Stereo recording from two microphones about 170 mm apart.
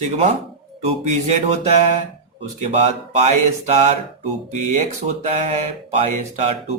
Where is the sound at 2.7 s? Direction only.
40° right (ahead or behind).